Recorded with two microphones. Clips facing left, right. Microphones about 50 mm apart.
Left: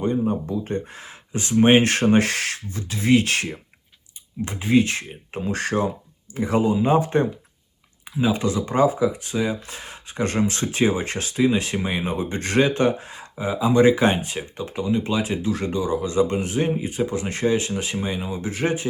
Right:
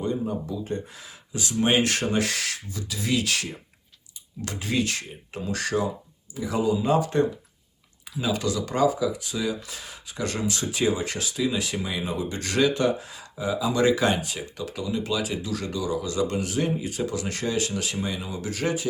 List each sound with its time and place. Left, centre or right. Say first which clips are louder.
0.0 s speech: left 5 dB; left
4.4 s speech: left 7 dB; left